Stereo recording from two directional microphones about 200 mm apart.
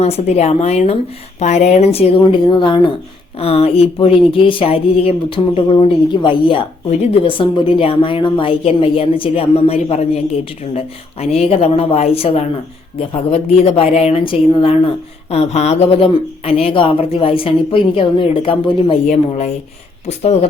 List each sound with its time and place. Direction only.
0.0 s speech: 30° left (ahead or behind)